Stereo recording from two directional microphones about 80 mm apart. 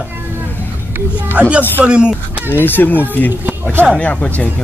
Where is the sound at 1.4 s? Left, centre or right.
Centre.